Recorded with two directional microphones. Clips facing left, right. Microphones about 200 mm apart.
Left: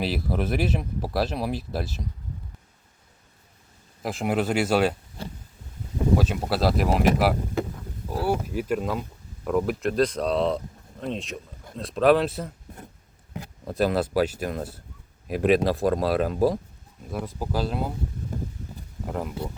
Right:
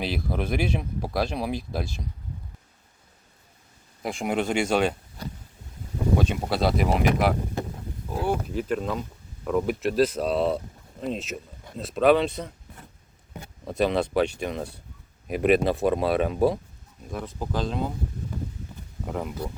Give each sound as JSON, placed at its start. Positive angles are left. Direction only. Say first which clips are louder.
{"t": 0.0, "sound": "speech", "louder": "left 2 dB", "side_deg": 5}
{"t": 4.0, "sound": "speech", "louder": "left 1 dB", "side_deg": 0}
{"t": 5.2, "sound": "a sound", "louder": "even", "side_deg": 30}
{"t": 6.1, "sound": "speech", "louder": "right 2 dB", "side_deg": 0}
{"t": 19.0, "sound": "speech", "louder": "even", "side_deg": 0}